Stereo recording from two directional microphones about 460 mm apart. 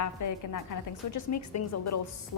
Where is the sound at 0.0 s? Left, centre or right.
Left.